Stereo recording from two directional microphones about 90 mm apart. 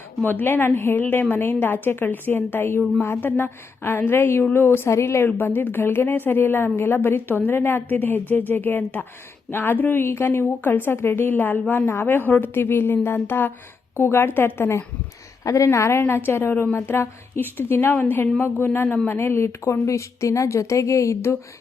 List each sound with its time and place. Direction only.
0.2 s a woman's voice: 20° left (ahead or behind)